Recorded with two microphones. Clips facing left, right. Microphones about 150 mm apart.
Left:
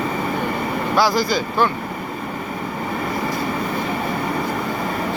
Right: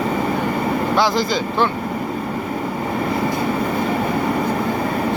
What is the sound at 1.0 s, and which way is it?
Speech, 20° right (ahead or behind).